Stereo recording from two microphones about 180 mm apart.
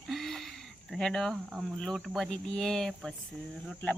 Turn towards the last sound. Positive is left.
turn(degrees=10)  # may be behind; listen again after turning